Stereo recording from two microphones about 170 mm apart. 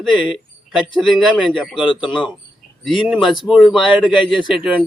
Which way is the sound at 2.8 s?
Centre (ahead or behind).